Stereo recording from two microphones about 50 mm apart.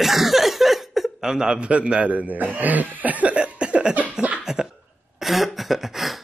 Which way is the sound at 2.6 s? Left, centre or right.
Right.